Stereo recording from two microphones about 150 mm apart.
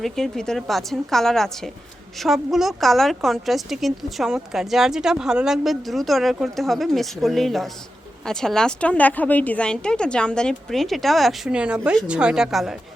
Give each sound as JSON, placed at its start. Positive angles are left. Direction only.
{"t": 0.0, "sound": "a woman's voice", "side_deg": 5}